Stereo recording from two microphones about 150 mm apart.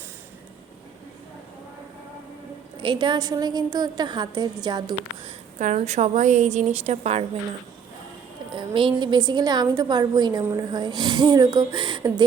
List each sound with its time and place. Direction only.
2.8 s a woman's voice: 30° right (ahead or behind)
5.5 s a woman's voice: 50° right (ahead or behind)
8.5 s a woman's voice: 35° right (ahead or behind)